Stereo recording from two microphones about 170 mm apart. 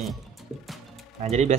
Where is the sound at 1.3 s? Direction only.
40° right (ahead or behind).